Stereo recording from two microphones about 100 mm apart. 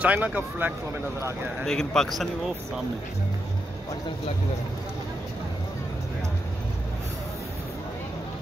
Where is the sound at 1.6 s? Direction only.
5° left (ahead or behind).